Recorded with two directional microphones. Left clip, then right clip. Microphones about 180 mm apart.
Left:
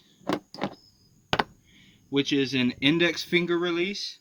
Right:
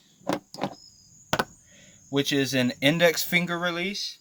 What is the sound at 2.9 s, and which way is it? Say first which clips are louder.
Speech: right 2 dB; 90° right.